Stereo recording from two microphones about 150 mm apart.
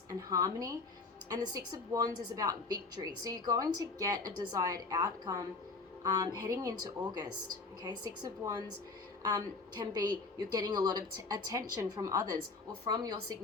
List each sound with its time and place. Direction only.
0.1 s a woman's voice: 25° right (ahead or behind)